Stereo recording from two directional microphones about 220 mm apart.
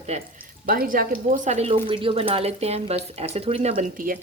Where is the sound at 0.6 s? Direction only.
40° right (ahead or behind).